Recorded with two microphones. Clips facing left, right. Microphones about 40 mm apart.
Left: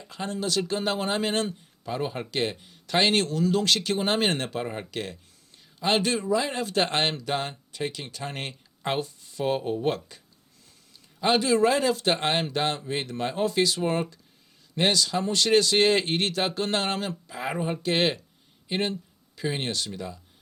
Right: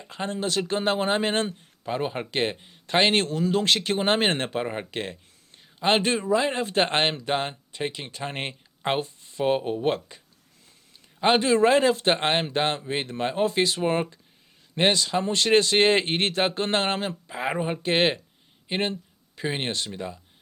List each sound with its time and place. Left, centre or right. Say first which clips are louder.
0.0 s speech: right 2 dB; right
11.2 s speech: right 2 dB; right